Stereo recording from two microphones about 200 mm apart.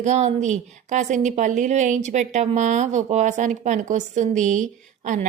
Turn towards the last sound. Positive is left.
turn(degrees=-40)  # may be behind; listen again after turning